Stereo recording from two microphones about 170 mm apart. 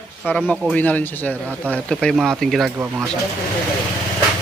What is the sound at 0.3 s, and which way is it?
Speech, 10° left (ahead or behind).